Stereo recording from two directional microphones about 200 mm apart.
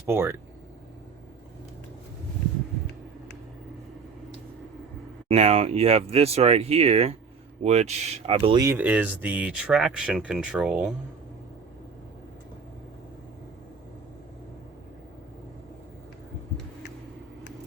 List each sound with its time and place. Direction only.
0.1 s speech: 10° right (ahead or behind)
5.3 s speech: 30° right (ahead or behind)
8.6 s speech: 10° right (ahead or behind)